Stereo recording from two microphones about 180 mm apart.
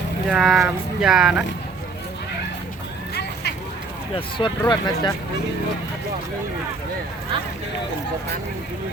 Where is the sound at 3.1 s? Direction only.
65° left (ahead or behind).